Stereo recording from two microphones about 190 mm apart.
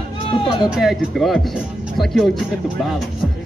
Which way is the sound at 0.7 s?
Centre (ahead or behind).